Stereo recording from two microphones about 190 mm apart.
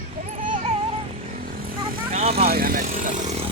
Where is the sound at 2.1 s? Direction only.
35° right (ahead or behind).